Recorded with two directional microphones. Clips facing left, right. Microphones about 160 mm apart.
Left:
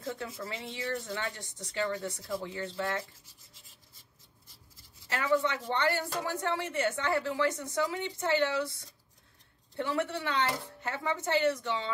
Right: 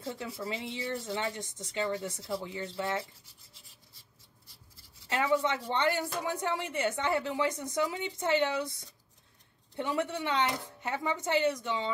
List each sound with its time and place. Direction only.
0.0 s speech: 20° right (ahead or behind)
5.1 s speech: 20° right (ahead or behind)